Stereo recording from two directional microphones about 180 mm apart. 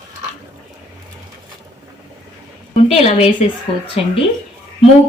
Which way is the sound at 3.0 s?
35° left (ahead or behind).